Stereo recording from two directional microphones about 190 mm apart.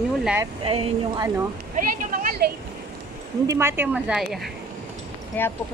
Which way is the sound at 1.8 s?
50° right (ahead or behind).